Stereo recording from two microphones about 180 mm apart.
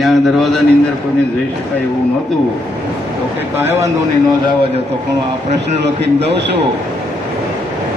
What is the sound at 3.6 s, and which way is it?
Speech, 10° right (ahead or behind).